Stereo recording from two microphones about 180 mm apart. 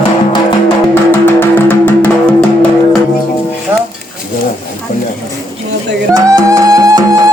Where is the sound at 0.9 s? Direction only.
10° left (ahead or behind).